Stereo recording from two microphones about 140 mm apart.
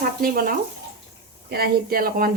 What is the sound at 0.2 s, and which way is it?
Speech, 90° right.